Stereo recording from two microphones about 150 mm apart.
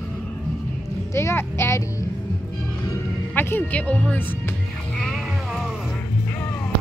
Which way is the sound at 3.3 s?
15° left (ahead or behind).